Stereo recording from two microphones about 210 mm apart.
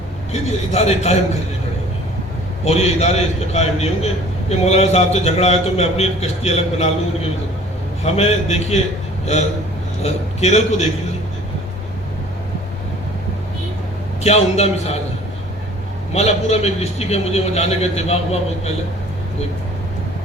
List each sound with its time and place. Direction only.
0.3 s a man's voice: 30° left (ahead or behind)
2.6 s a man's voice: 30° left (ahead or behind)
8.0 s a man's voice: 30° left (ahead or behind)
10.0 s a man's voice: 30° left (ahead or behind)
14.3 s a man's voice: 30° left (ahead or behind)
16.1 s a man's voice: 30° left (ahead or behind)